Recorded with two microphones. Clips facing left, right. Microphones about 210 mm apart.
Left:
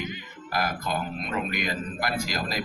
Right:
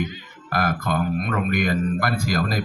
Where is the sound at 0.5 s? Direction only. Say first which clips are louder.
Right 5 dB; 55° right (ahead or behind).